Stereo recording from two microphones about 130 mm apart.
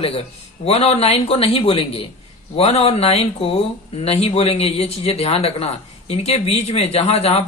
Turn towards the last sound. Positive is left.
turn(degrees=55)  # may be behind; listen again after turning